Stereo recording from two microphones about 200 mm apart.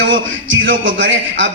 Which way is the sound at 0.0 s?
70° right (ahead or behind).